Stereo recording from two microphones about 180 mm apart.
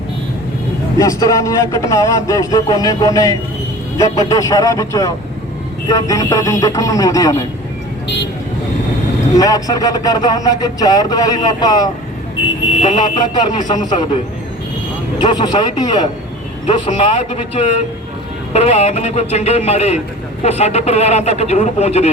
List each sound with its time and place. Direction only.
0.9 s speech: 20° left (ahead or behind)
9.4 s speech: 20° left (ahead or behind)
12.8 s speech: 40° left (ahead or behind)
13.3 s speech: 20° left (ahead or behind)
15.2 s speech: 25° left (ahead or behind)
18.5 s speech: 35° left (ahead or behind)